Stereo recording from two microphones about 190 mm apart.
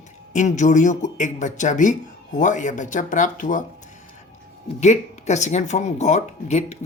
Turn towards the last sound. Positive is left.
turn(degrees=35)  # may be behind; listen again after turning